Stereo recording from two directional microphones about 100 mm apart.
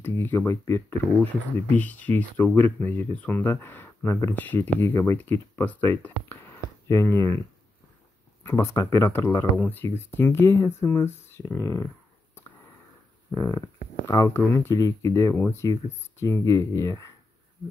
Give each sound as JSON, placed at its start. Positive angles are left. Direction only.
{"t": 0.0, "sound": "speech", "side_deg": 25}
{"t": 6.9, "sound": "speech", "side_deg": 30}
{"t": 8.5, "sound": "speech", "side_deg": 30}
{"t": 13.3, "sound": "speech", "side_deg": 30}
{"t": 15.3, "sound": "speech", "side_deg": 20}